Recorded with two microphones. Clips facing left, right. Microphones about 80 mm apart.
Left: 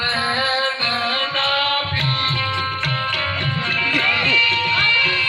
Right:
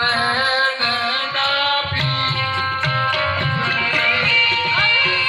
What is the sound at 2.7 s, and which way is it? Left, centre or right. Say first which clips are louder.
Music: right 4 dB; right.